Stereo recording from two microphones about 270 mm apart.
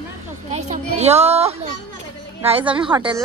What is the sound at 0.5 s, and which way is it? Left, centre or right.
Children playing, right.